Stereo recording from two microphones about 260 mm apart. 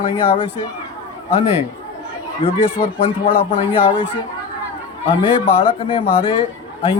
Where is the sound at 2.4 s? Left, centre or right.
Left.